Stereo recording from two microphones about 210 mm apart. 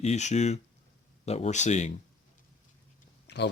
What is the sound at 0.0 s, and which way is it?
Speech, 30° left (ahead or behind).